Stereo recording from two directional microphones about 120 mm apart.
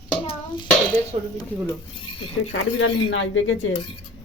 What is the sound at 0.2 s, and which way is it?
Dishes, 45° left (ahead or behind).